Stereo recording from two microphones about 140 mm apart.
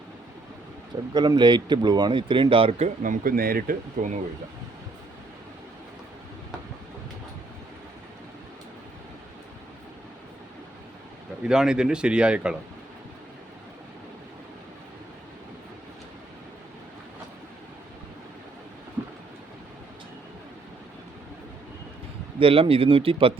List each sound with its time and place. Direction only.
1.1 s speech: 30° right (ahead or behind); by 4.2 s 75° right (ahead or behind)
11.4 s speech: 5° right (ahead or behind)
22.4 s speech: 40° right (ahead or behind)